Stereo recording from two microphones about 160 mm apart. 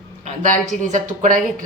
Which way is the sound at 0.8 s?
50° right (ahead or behind).